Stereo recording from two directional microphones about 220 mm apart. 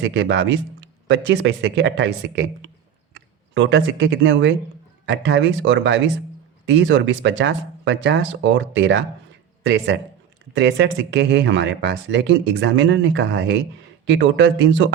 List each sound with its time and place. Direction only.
0.0 s speech: 55° right (ahead or behind)